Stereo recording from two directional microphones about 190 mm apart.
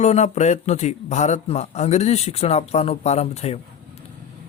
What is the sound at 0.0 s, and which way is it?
A man's voice, 35° left (ahead or behind).